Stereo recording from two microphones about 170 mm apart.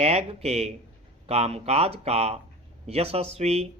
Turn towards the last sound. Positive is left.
turn(degrees=-35)  # may be behind; listen again after turning